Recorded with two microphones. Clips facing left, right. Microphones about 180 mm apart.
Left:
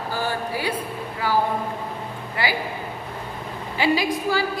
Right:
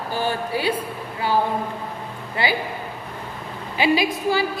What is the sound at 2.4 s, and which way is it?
Speech, 25° right (ahead or behind).